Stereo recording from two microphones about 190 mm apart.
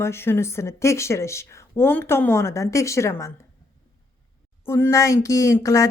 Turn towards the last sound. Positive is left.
turn(degrees=15)  # may be behind; listen again after turning